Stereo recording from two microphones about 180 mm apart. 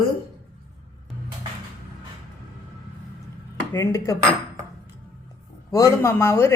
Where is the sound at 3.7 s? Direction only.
15° left (ahead or behind).